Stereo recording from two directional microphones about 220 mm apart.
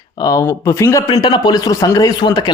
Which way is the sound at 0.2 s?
15° left (ahead or behind).